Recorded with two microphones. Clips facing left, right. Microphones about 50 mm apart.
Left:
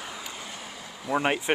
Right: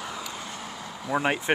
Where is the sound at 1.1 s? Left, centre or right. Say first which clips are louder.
Even; centre.